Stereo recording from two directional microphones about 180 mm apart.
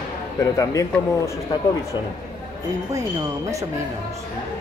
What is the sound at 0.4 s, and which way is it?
Speech, 15° left (ahead or behind).